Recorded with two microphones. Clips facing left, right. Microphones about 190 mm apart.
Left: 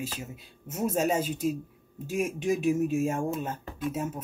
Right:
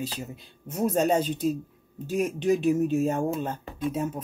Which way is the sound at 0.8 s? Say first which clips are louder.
Right 3 dB; 5° left (ahead or behind).